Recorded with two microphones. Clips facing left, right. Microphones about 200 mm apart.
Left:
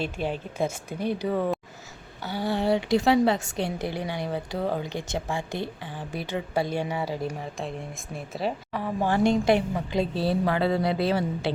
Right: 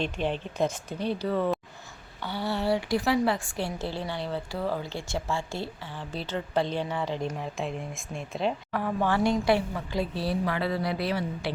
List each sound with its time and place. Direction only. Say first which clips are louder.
0.0 s a woman's voice: even; 10° left (ahead or behind)
9.5 s a woman's voice: left 3 dB; 20° left (ahead or behind)